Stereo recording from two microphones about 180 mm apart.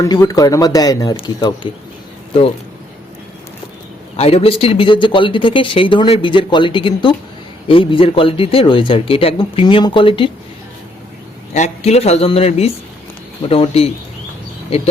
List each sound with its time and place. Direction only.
0.0 s speech: 20° left (ahead or behind)
4.2 s speech: 35° left (ahead or behind)
11.5 s speech: 40° left (ahead or behind)